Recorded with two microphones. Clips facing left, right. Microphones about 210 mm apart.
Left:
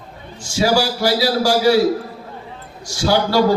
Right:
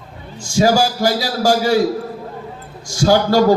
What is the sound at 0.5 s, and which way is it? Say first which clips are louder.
A man's voice: right 2 dB; 45° right (ahead or behind).